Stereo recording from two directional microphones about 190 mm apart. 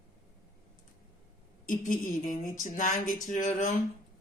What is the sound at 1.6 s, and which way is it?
Speech, 45° left (ahead or behind).